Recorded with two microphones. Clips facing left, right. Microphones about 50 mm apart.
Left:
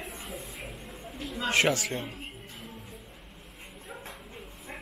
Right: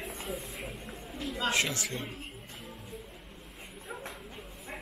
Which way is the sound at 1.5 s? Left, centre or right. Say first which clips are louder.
Left 9 dB; left.